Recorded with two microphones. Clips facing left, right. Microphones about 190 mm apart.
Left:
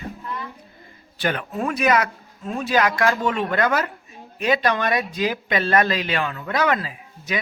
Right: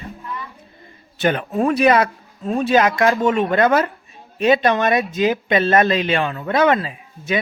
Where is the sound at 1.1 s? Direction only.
25° right (ahead or behind).